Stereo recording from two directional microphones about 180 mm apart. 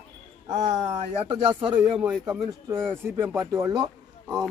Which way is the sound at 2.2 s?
15° right (ahead or behind).